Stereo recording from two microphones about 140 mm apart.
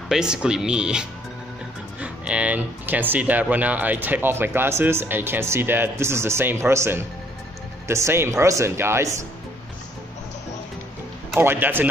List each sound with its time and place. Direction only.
0.1 s speech: 5° right (ahead or behind)
11.3 s speech: 15° right (ahead or behind)